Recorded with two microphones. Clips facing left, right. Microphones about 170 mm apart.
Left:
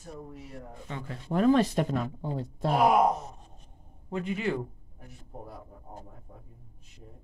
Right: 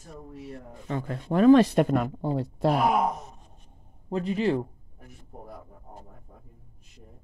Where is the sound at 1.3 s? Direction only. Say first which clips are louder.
Right 6 dB; 80° right.